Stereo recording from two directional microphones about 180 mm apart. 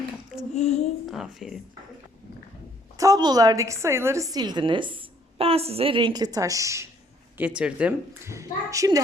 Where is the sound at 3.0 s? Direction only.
20° right (ahead or behind).